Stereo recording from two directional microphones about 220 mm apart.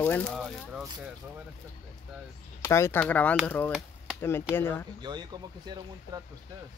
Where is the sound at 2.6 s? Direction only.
10° left (ahead or behind).